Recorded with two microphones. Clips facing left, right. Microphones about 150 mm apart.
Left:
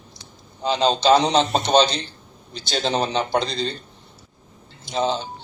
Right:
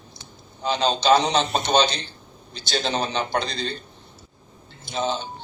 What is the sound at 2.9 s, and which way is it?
Speech, 20° left (ahead or behind).